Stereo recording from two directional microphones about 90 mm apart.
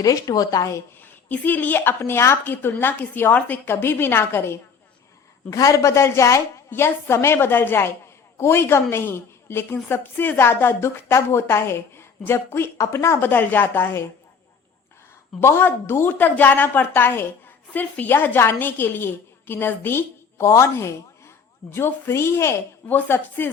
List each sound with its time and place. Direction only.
0.0 s speech: 40° left (ahead or behind)
1.0 s a woman's voice: 20° left (ahead or behind)
5.5 s a woman's voice: 40° left (ahead or behind); by 14.0 s 20° left (ahead or behind)
15.4 s a woman's voice: 30° left (ahead or behind)